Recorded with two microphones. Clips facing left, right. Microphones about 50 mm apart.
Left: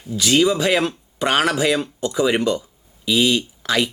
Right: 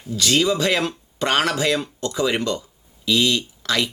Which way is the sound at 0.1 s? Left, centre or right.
Centre.